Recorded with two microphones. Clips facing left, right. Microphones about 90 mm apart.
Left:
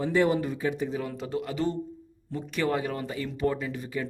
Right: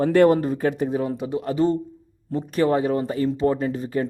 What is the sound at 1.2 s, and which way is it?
Speech, 20° right (ahead or behind).